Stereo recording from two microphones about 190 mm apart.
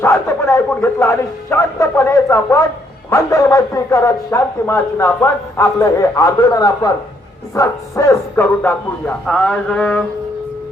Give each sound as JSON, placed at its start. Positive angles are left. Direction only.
{"t": 0.0, "sound": "speech", "side_deg": 15}
{"t": 9.2, "sound": "mantra", "side_deg": 5}